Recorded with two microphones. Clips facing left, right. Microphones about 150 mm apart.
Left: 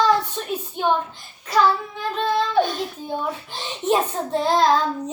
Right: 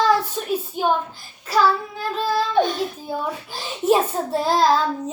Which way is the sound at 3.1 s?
5° right (ahead or behind).